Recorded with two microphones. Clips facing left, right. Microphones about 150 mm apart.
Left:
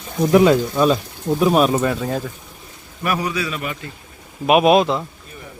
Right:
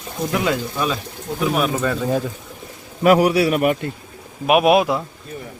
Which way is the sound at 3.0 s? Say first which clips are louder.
Right 9 dB; 85° right.